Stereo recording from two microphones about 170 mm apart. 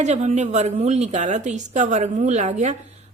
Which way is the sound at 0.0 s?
45° right (ahead or behind).